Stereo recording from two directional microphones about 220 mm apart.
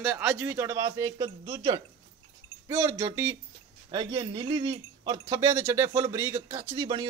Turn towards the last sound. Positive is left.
turn(degrees=-15)  # may be behind; listen again after turning